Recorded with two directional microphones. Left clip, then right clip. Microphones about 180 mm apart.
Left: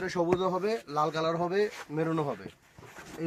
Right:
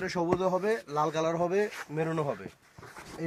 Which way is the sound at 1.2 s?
40° right (ahead or behind).